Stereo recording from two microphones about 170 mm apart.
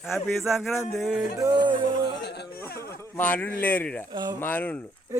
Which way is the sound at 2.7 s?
65° left (ahead or behind).